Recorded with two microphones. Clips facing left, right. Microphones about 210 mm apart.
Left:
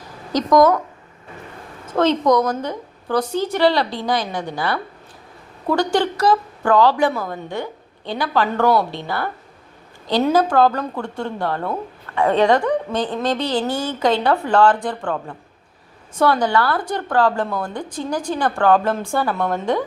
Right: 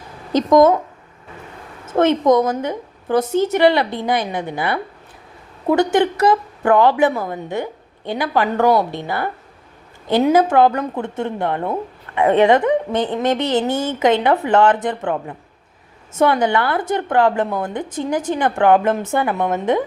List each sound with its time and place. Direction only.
0.3 s speech: 25° right (ahead or behind)
1.9 s a woman's voice: 20° right (ahead or behind)